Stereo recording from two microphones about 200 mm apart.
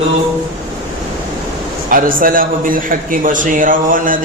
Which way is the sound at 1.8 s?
45° right (ahead or behind).